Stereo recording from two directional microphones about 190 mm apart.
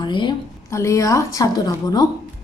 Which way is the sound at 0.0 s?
25° left (ahead or behind).